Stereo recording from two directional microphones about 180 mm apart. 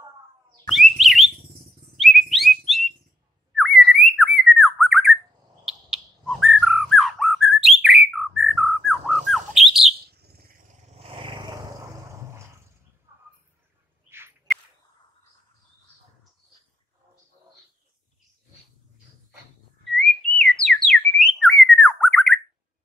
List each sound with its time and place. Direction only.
0.7 s bird: centre (ahead or behind)
9.9 s bird: 60° right (ahead or behind)
10.9 s a sound: 30° right (ahead or behind)
13.1 s bird: 15° right (ahead or behind)
14.0 s whip: 15° right (ahead or behind)
20.3 s whistling: 5° left (ahead or behind)